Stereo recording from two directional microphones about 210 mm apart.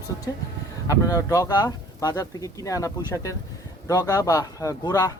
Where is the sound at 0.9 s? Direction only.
15° left (ahead or behind).